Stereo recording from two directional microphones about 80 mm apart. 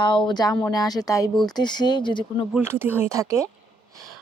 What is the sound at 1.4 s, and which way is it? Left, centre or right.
Speech, left.